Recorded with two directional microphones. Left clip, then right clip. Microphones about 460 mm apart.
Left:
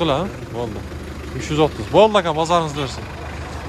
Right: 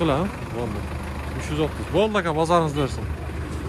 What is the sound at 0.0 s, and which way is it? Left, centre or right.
Speech, centre.